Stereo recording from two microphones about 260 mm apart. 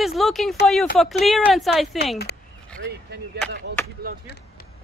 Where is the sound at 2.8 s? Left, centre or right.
Right.